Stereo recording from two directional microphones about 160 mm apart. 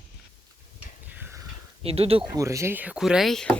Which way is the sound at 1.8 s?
40° right (ahead or behind).